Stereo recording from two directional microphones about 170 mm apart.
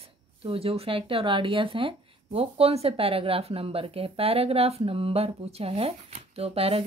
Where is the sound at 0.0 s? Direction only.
35° right (ahead or behind).